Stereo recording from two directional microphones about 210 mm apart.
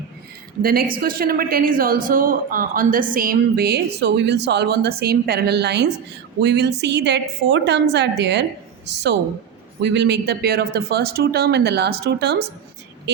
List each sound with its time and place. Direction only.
0.6 s a woman's voice: 45° right (ahead or behind)
9.8 s a woman's voice: 55° right (ahead or behind)